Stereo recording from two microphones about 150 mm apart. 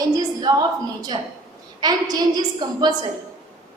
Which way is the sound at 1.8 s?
25° right (ahead or behind).